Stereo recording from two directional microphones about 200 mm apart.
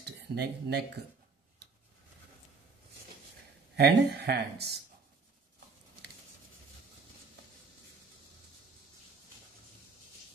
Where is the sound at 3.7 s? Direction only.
55° right (ahead or behind).